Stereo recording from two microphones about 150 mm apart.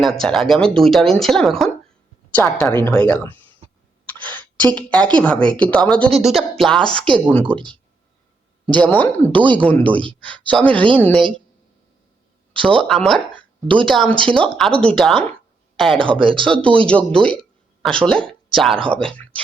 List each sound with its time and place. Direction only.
0.0 s speech: 5° left (ahead or behind)
4.0 s a sound: 10° left (ahead or behind)
5.2 s speech: 5° left (ahead or behind)
7.4 s speech: 35° right (ahead or behind)
8.6 s speech: 10° left (ahead or behind)
9.8 s speech: 35° right (ahead or behind)
10.1 s speech: 10° left (ahead or behind)
12.6 s a woman's voice: 5° left (ahead or behind)
16.2 s speech: 35° right (ahead or behind)
16.5 s speech: 10° left (ahead or behind)